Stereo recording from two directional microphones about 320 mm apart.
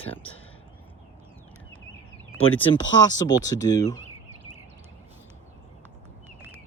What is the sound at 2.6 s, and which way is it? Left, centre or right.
Speech, centre.